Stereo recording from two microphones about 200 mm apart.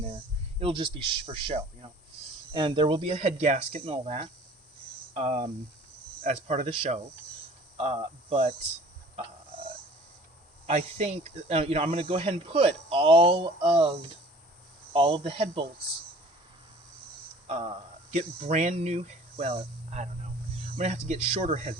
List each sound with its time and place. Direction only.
0.6 s speech: 25° right (ahead or behind)
7.8 s speech: 30° right (ahead or behind)
10.7 s speech: 30° right (ahead or behind)
14.9 s speech: 25° right (ahead or behind)
17.4 s a sound: 35° right (ahead or behind)
18.1 s speech: 35° right (ahead or behind)